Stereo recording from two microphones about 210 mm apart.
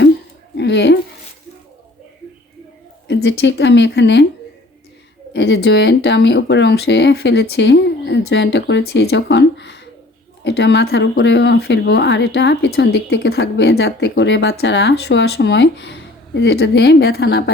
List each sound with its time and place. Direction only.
0.5 s speech: 55° left (ahead or behind)
3.1 s speech: 55° left (ahead or behind)
5.3 s speech: 55° left (ahead or behind)